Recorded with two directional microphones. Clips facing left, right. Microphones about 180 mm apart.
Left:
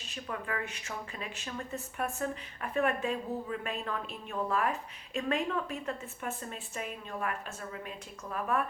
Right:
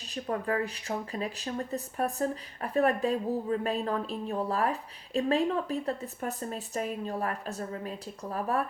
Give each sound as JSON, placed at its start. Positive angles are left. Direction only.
{"t": 0.1, "sound": "speech", "side_deg": -35}